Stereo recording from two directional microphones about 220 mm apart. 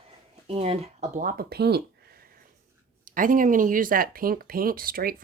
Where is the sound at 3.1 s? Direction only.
40° right (ahead or behind).